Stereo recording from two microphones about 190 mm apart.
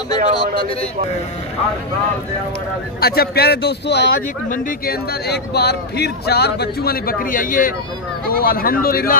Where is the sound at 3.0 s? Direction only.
55° left (ahead or behind).